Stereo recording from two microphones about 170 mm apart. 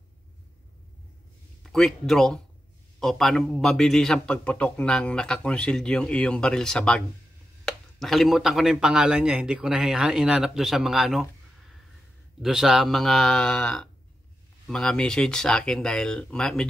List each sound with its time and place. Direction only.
1.6 s a man's voice: centre (ahead or behind)
12.4 s a man's voice: centre (ahead or behind)